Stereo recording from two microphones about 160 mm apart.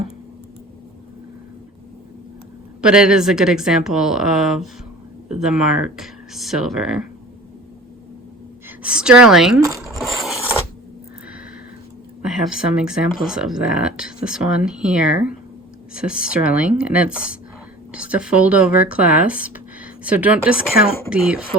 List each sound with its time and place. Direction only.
2.8 s speech: 5° right (ahead or behind)
8.8 s speech: 5° right (ahead or behind)
9.6 s speech: 20° right (ahead or behind)
10.0 s scrape: centre (ahead or behind)
12.2 s speech: 5° right (ahead or behind)